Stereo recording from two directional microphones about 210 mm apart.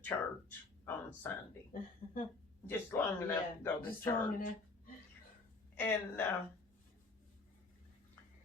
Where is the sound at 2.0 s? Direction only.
45° left (ahead or behind).